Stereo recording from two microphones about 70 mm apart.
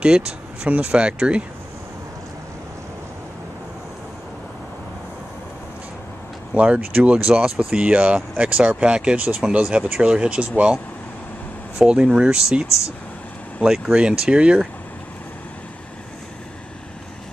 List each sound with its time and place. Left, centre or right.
0.0 s speech: centre
6.5 s speech: centre
11.8 s speech: centre